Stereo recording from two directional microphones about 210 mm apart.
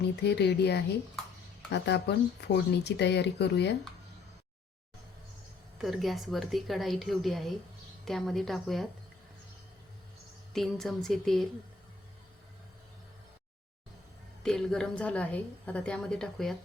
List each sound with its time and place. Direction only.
0.2 s speech: 50° left (ahead or behind)
5.8 s a woman's voice: centre (ahead or behind)
10.5 s a woman's voice: centre (ahead or behind)
14.4 s a woman's voice: 5° left (ahead or behind)